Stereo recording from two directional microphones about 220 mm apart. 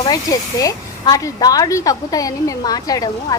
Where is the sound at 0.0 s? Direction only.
15° left (ahead or behind).